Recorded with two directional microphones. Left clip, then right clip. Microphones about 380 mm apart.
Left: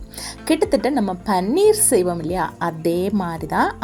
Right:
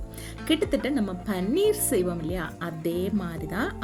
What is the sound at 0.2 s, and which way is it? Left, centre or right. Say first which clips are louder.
A woman's voice: left 7 dB; right.